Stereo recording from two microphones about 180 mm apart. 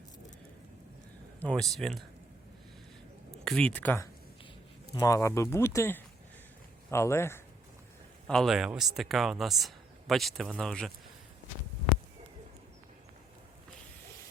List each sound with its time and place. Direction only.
1.4 s speech: 5° left (ahead or behind)
3.4 s speech: 5° left (ahead or behind)
8.3 s speech: centre (ahead or behind)